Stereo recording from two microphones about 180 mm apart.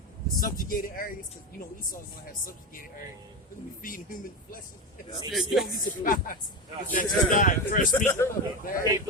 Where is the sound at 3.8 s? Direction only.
50° left (ahead or behind).